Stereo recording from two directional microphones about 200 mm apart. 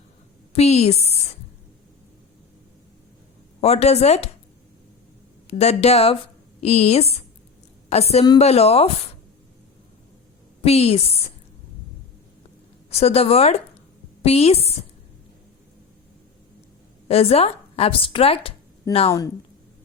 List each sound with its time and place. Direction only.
0.5 s a woman's voice: 30° left (ahead or behind)
3.6 s a woman's voice: 30° left (ahead or behind)
5.5 s a woman's voice: 30° left (ahead or behind)
10.7 s a woman's voice: 30° left (ahead or behind)
12.9 s a woman's voice: 30° left (ahead or behind)
17.1 s speech: 30° left (ahead or behind)